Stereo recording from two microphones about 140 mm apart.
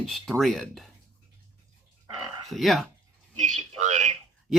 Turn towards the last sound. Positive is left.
turn(degrees=-55)  # may be behind; listen again after turning